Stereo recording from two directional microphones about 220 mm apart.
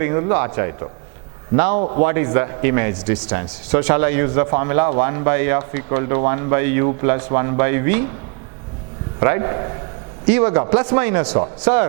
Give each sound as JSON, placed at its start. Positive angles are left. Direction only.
{"t": 0.0, "sound": "a man's voice", "side_deg": -15}
{"t": 1.8, "sound": "a man's voice", "side_deg": -30}
{"t": 2.0, "sound": "a man's voice", "side_deg": -15}
{"t": 9.2, "sound": "a man's voice", "side_deg": -15}